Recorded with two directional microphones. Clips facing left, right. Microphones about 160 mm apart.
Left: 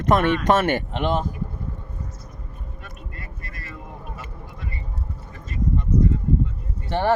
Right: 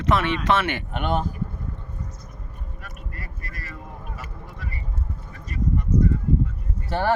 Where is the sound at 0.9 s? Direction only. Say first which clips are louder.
Left 2 dB; 25° left (ahead or behind).